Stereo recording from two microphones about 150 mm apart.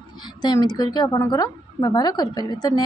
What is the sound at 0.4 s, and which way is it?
A woman's voice, 25° left (ahead or behind).